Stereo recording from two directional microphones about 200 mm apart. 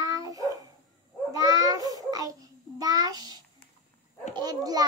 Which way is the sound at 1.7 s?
20° right (ahead or behind).